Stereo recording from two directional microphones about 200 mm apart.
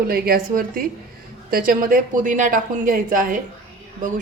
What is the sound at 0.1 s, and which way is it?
A woman's voice, 50° right (ahead or behind).